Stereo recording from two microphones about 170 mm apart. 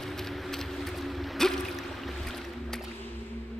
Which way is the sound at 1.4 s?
5° left (ahead or behind).